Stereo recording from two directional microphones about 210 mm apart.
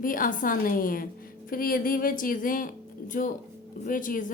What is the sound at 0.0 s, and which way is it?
A woman's voice, 40° left (ahead or behind).